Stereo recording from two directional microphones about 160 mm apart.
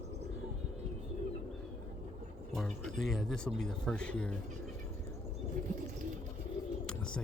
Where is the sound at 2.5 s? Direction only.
Centre (ahead or behind).